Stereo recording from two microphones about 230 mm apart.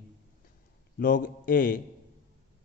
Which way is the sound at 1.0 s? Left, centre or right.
Left.